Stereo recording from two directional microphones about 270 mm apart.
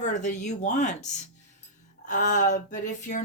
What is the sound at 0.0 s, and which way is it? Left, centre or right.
Speech, left.